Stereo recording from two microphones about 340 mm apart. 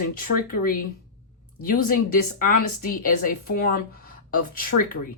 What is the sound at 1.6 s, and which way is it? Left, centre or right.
Speech, left.